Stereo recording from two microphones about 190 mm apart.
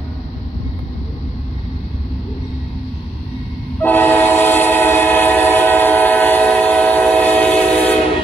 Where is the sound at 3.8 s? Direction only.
10° left (ahead or behind).